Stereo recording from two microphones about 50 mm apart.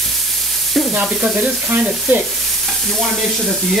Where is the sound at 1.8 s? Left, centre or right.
Right.